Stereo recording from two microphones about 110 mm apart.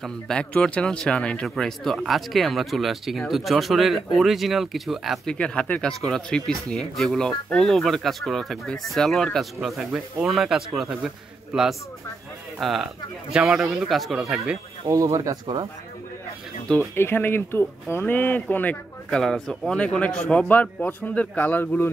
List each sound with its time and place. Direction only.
0.0 s speech: 10° left (ahead or behind)
12.5 s speech: centre (ahead or behind)
14.9 s speech: 30° right (ahead or behind)
16.9 s a man's voice: 20° left (ahead or behind)